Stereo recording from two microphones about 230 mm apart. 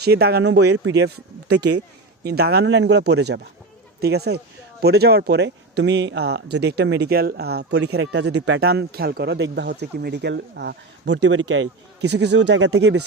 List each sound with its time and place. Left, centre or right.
0.0 s speech: right
0.6 s speech: right
0.9 s speech: right
2.2 s speech: right